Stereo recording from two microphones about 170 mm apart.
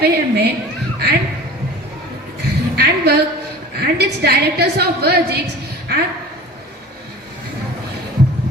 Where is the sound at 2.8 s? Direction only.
70° right (ahead or behind).